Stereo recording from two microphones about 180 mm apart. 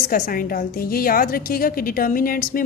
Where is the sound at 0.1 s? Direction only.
50° left (ahead or behind).